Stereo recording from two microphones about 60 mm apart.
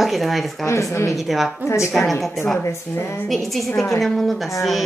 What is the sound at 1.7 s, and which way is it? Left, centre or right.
A woman's voice, left.